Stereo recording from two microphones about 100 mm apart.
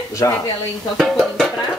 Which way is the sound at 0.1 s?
35° left (ahead or behind).